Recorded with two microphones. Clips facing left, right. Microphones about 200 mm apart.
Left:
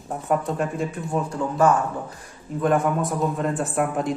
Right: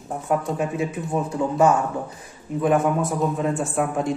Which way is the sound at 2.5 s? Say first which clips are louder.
Right 1 dB; 5° right (ahead or behind).